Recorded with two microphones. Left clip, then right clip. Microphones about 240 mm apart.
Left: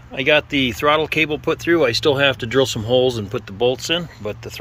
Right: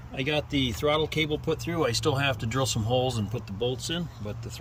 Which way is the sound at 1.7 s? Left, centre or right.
Left.